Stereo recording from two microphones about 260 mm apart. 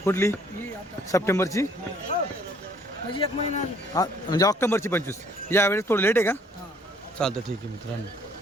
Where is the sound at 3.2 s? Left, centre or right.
Centre.